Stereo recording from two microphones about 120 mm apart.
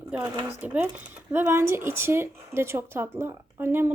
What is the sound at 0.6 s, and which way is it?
Speech, 15° right (ahead or behind).